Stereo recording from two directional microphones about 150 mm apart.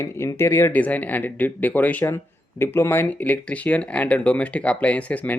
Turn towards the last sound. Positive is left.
turn(degrees=10)  # may be behind; listen again after turning